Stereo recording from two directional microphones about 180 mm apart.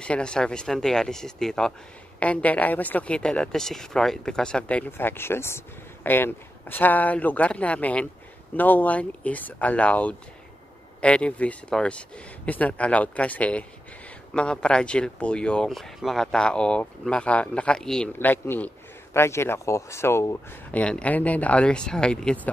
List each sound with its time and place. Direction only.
0.0 s a woman's voice: 5° left (ahead or behind)